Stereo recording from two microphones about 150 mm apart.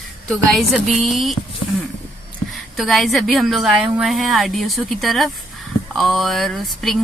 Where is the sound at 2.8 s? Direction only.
Centre (ahead or behind).